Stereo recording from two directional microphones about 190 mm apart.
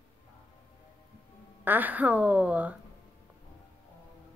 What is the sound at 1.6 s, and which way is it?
A woman's voice, 10° right (ahead or behind).